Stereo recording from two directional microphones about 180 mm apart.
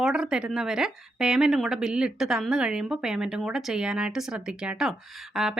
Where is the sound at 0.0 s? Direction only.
5° right (ahead or behind).